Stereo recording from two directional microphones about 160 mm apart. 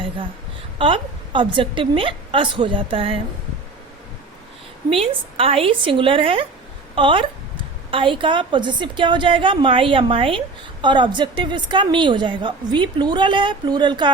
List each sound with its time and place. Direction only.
0.8 s a woman's voice: 35° right (ahead or behind)
4.9 s a woman's voice: 35° right (ahead or behind)